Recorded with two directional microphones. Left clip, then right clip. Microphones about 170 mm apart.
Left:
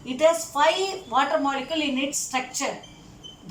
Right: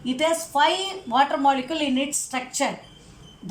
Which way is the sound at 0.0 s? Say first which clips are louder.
Left 2 dB; 35° right (ahead or behind).